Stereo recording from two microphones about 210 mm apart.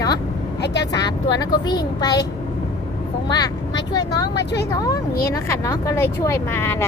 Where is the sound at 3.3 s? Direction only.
20° left (ahead or behind).